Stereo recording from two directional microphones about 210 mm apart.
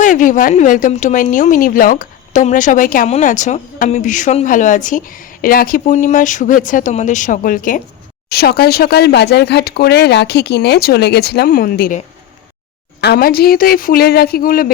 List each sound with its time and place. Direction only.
0.0 s a woman's voice: 40° left (ahead or behind)